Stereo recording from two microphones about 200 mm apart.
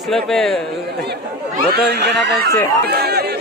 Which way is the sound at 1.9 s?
60° right (ahead or behind).